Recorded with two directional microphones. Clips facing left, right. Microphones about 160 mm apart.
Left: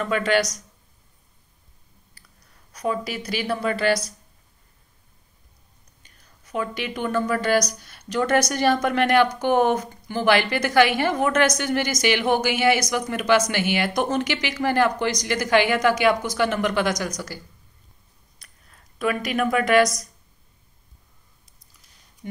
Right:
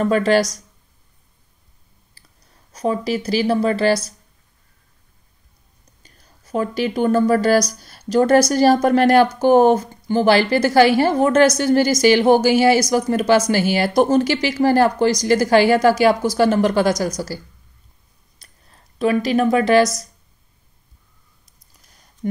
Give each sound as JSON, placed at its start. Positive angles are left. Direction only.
{"t": 0.0, "sound": "speech", "side_deg": -35}
{"t": 2.2, "sound": "clicking", "side_deg": -25}
{"t": 2.7, "sound": "speech", "side_deg": -30}
{"t": 6.0, "sound": "speech", "side_deg": -35}
{"t": 18.4, "sound": "a sound", "side_deg": -30}
{"t": 22.2, "sound": "a sound", "side_deg": -45}